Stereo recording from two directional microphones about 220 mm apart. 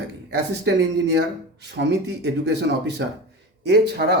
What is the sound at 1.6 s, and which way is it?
Speech, 50° right (ahead or behind).